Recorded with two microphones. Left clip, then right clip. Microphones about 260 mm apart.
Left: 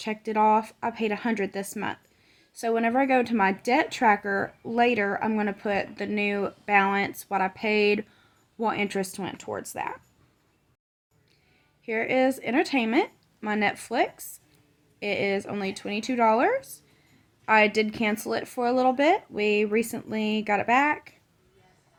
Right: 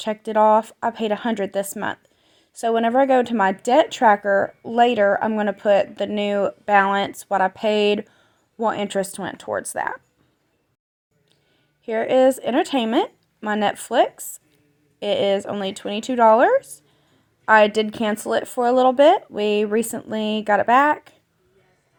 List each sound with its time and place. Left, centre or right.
0.0 s speech: centre
11.9 s a woman's voice: centre